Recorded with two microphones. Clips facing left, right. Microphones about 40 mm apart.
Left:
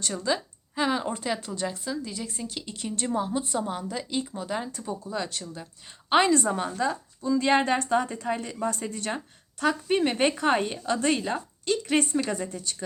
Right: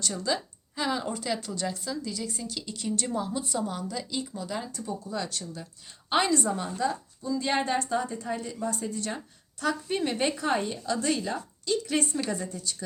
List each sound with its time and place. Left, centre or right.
0.0 s a woman's voice: left